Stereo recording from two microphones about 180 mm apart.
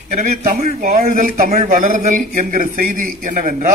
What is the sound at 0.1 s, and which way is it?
A man's voice, 40° right (ahead or behind).